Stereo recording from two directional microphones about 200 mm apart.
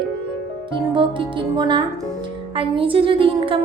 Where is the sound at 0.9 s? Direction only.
25° right (ahead or behind).